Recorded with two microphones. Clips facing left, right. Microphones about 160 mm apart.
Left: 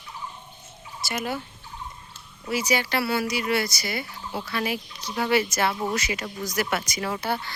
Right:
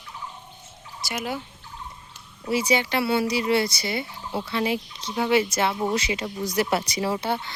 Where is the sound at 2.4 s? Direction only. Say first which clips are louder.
Right 2 dB; 30° right (ahead or behind).